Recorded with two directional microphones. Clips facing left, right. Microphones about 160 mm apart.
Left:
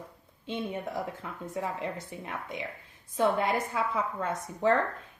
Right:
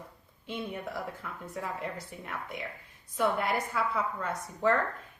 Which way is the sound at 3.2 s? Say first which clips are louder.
Left 2 dB; 20° left (ahead or behind).